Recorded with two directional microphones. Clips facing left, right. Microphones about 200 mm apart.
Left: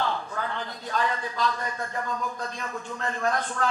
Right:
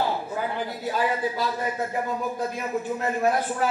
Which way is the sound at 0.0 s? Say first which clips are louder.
Right 3 dB; 10° right (ahead or behind).